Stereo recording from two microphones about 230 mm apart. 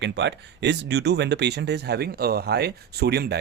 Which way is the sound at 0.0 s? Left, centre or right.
Right.